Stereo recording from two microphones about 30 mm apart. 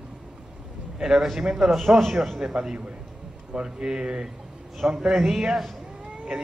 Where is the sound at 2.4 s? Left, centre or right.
Right.